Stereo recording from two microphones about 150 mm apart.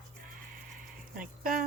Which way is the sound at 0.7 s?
65° right (ahead or behind).